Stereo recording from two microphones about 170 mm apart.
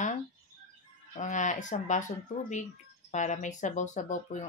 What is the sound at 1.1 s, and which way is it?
Speech, 45° left (ahead or behind).